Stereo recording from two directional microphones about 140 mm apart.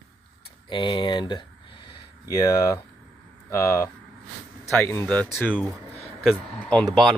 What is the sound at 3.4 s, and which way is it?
Speech, 20° left (ahead or behind).